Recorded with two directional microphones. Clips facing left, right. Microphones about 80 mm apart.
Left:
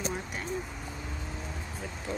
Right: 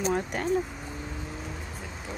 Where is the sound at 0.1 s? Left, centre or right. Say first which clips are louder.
Right 8 dB; right.